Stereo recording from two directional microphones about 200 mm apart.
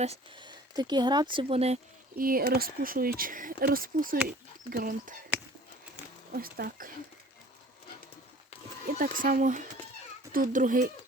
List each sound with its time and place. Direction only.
0.0 s speech: 25° right (ahead or behind)
2.1 s speech: 45° right (ahead or behind)
6.3 s speech: 50° right (ahead or behind)
8.9 s a child's voice: 45° right (ahead or behind)